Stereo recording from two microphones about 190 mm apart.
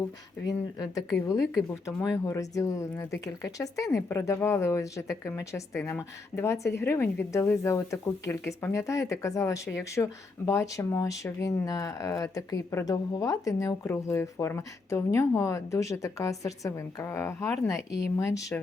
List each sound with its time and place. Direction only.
0.4 s speech: 20° left (ahead or behind)
1.4 s speech: centre (ahead or behind)
2.1 s a woman's voice: 15° left (ahead or behind)